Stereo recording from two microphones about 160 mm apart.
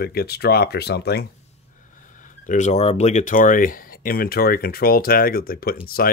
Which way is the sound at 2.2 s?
55° left (ahead or behind).